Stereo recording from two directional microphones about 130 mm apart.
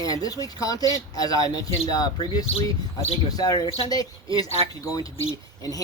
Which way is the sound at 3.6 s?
50° left (ahead or behind).